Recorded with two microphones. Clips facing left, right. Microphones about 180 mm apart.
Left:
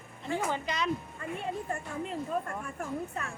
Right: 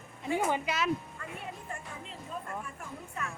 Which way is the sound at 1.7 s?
50° left (ahead or behind).